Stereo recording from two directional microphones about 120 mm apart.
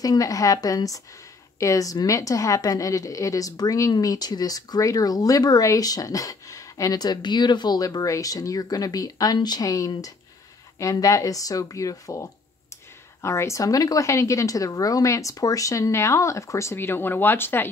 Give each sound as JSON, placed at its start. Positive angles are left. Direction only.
{"t": 0.0, "sound": "a woman's voice", "side_deg": 30}